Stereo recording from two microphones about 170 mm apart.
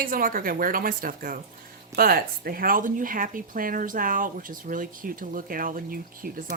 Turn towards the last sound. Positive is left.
turn(degrees=-55)  # may be behind; listen again after turning